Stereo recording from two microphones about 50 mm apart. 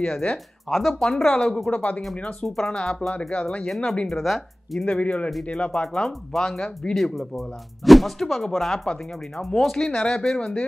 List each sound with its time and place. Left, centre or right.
0.7 s speech: centre
1.3 s speech: centre
2.4 s speech: centre
3.6 s speech: centre
4.8 s speech: centre
5.7 s speech: centre
9.4 s speech: left
9.8 s speech: centre